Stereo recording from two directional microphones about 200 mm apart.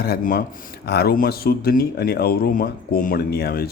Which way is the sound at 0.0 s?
50° left (ahead or behind).